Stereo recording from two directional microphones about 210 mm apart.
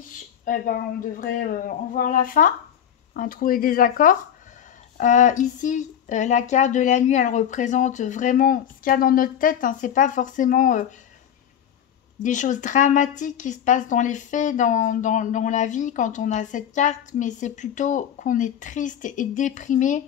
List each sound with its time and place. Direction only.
0.5 s speech: 40° left (ahead or behind)
12.2 s speech: 35° left (ahead or behind)